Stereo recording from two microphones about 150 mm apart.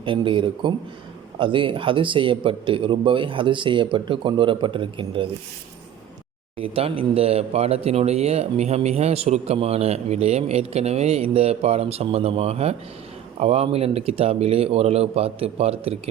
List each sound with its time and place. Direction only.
0.0 s speech: 35° right (ahead or behind)
6.6 s speech: 40° right (ahead or behind)